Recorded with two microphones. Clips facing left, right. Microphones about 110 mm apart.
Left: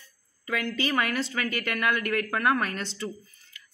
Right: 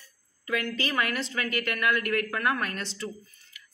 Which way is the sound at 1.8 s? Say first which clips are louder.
Even; 25° left (ahead or behind).